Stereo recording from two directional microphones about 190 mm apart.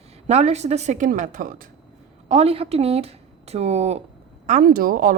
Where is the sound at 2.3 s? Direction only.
30° right (ahead or behind).